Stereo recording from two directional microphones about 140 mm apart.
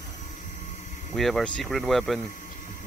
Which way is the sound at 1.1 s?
Centre (ahead or behind).